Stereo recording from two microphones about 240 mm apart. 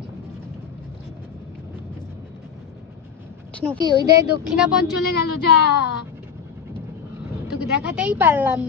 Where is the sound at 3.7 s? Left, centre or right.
Centre.